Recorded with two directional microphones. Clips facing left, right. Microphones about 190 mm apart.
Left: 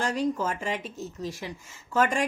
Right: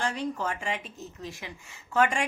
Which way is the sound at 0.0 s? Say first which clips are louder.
Left 4 dB; 40° left (ahead or behind).